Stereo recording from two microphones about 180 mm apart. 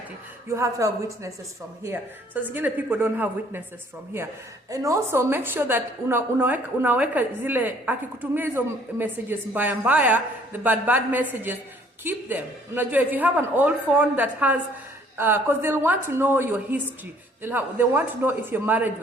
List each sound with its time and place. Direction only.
0.4 s a woman's voice: 15° right (ahead or behind)
4.7 s a woman's voice: 15° right (ahead or behind)